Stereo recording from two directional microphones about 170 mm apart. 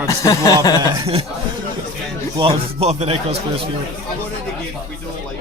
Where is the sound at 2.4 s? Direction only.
35° right (ahead or behind).